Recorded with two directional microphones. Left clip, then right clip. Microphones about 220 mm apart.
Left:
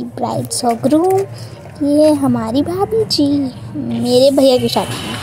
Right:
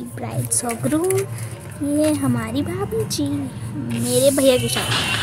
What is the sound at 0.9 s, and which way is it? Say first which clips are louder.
Speech: left 6 dB; centre (ahead or behind).